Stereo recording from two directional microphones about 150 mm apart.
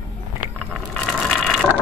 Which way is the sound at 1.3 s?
5° right (ahead or behind).